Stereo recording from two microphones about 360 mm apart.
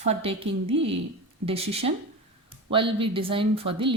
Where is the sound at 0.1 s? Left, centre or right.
Centre.